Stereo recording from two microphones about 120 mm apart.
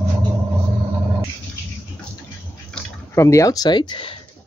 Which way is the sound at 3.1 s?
25° left (ahead or behind).